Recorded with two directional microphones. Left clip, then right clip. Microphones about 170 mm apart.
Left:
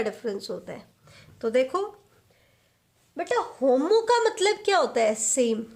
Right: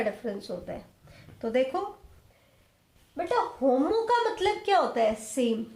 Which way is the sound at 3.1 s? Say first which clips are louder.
Left 1 dB; 40° left (ahead or behind).